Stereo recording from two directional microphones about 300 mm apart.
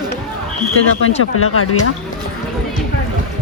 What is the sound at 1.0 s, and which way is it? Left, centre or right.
Speech, left.